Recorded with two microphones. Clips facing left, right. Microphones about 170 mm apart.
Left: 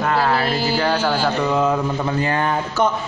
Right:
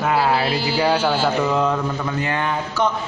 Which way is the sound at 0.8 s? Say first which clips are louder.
Right 3 dB; 10° right (ahead or behind).